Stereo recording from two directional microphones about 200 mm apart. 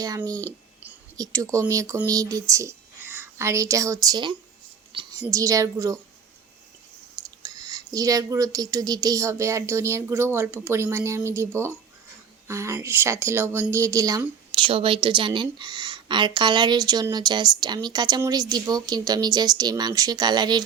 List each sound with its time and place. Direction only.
0.0 s a woman's voice: 20° right (ahead or behind)
7.2 s speech: 20° right (ahead or behind)
14.7 s a woman's voice: 25° right (ahead or behind)